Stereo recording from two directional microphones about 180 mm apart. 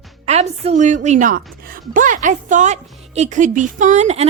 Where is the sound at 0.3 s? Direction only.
35° right (ahead or behind).